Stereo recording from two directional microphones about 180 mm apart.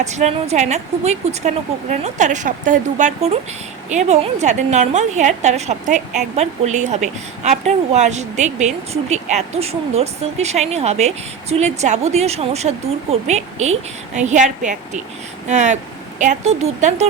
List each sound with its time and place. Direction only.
0.0 s a woman's voice: 40° right (ahead or behind)